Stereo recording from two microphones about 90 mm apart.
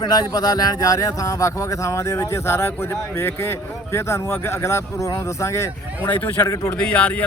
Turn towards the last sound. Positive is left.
turn(degrees=15)  # may be behind; listen again after turning